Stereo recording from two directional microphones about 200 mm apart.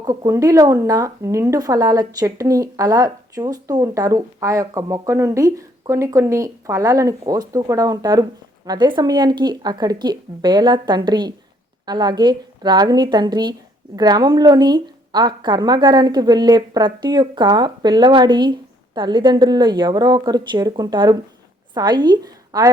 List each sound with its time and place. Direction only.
0.0 s a woman's voice: 20° right (ahead or behind)